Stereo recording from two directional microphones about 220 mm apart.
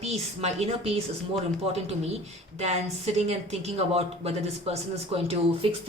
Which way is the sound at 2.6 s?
30° right (ahead or behind).